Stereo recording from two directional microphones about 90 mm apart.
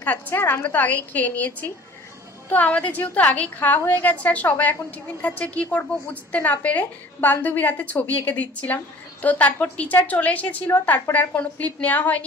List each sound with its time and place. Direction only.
0.0 s a woman's voice: 20° left (ahead or behind)